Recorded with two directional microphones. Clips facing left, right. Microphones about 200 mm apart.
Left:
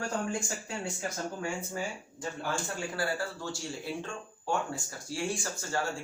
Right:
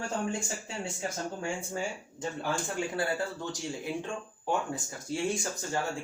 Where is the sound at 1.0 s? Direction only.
25° right (ahead or behind).